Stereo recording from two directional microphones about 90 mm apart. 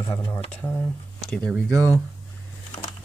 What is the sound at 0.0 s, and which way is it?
Speech, 60° left (ahead or behind).